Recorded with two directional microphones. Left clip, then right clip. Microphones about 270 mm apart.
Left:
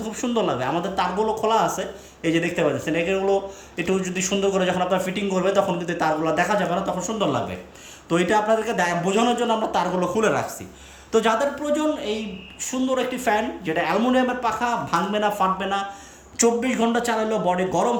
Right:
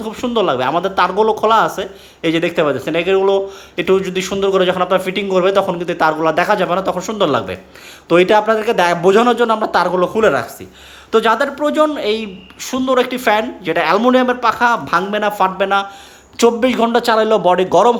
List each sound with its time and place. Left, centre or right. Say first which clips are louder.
0.0 s speech: right 7 dB; centre